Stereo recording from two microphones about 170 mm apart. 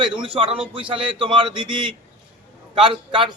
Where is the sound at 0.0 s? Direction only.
30° right (ahead or behind).